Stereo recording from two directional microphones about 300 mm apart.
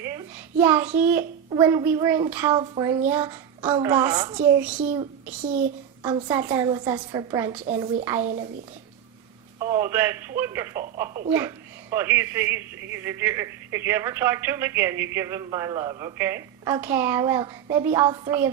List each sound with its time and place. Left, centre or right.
0.0 s a sound: centre
0.9 s a man's voice: centre
5.4 s a child's voice: right
6.0 s a man's voice: centre
9.6 s a man's voice: centre